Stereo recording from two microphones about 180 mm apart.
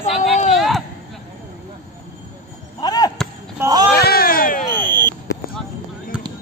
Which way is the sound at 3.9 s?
55° left (ahead or behind).